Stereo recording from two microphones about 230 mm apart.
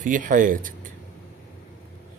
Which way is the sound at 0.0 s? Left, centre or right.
Right.